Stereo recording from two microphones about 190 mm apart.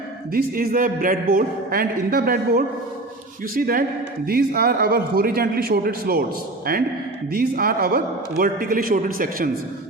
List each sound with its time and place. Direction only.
0.3 s a man's voice: 50° right (ahead or behind)